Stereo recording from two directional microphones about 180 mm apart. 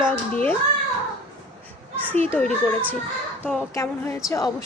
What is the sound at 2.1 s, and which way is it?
Speech, 10° left (ahead or behind).